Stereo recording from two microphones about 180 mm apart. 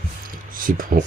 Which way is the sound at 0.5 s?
50° right (ahead or behind).